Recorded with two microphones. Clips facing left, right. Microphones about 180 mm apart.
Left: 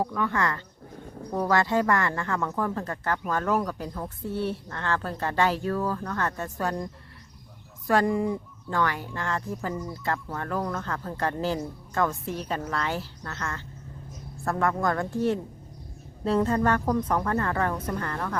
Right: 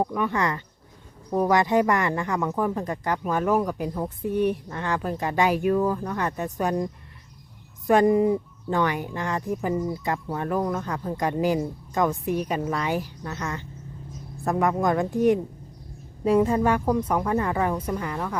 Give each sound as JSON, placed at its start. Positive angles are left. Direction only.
{"t": 0.0, "sound": "speech", "side_deg": -20}